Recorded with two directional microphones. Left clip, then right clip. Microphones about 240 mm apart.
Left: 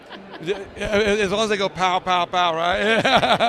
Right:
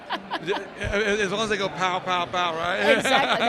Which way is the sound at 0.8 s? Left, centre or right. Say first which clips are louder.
Left 5 dB; left.